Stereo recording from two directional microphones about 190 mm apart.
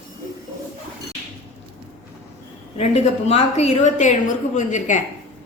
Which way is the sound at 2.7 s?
35° left (ahead or behind).